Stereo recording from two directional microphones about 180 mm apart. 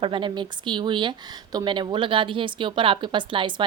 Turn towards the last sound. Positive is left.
turn(degrees=-25)  # may be behind; listen again after turning